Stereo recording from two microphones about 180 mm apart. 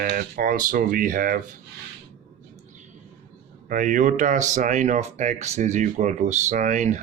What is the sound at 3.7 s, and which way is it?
Speech, 45° right (ahead or behind).